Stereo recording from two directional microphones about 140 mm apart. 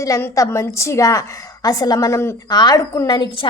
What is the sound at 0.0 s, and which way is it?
A woman's voice, 20° left (ahead or behind).